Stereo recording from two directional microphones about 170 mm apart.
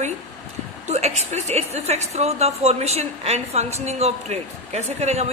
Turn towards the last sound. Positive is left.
turn(degrees=-40)  # may be behind; listen again after turning